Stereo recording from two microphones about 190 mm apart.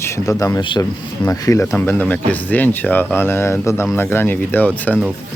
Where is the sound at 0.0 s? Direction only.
15° left (ahead or behind).